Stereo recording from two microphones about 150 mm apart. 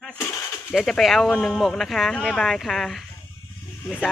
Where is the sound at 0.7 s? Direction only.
Centre (ahead or behind).